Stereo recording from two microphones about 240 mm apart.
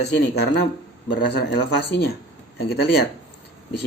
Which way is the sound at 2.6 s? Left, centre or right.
Left.